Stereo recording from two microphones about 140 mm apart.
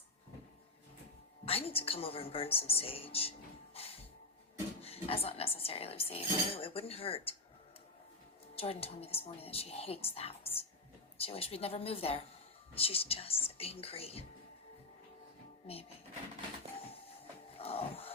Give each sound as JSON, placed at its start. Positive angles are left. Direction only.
{"t": 1.5, "sound": "speech", "side_deg": 45}
{"t": 3.8, "sound": "music", "side_deg": 45}
{"t": 4.8, "sound": "speech", "side_deg": 45}
{"t": 8.5, "sound": "speech", "side_deg": 45}
{"t": 15.6, "sound": "speech", "side_deg": 45}
{"t": 17.5, "sound": "music", "side_deg": 45}